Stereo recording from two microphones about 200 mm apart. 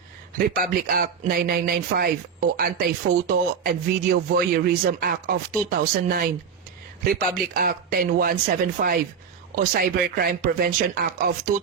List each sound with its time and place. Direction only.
0.3 s speech: 45° right (ahead or behind)
7.3 s speech: 45° right (ahead or behind)